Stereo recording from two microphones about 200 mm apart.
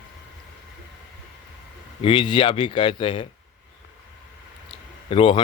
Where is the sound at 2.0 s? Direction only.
25° left (ahead or behind).